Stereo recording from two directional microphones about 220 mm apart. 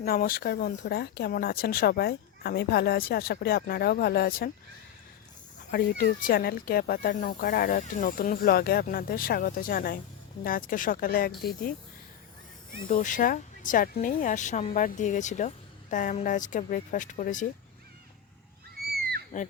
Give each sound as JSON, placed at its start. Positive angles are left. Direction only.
{"t": 0.0, "sound": "speech", "side_deg": 40}
{"t": 5.7, "sound": "speech", "side_deg": 45}
{"t": 12.9, "sound": "speech", "side_deg": 35}
{"t": 19.3, "sound": "speech", "side_deg": 40}